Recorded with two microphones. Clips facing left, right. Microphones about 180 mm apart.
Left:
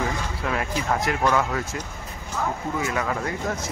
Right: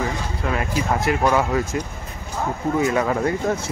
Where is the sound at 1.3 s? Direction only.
20° right (ahead or behind).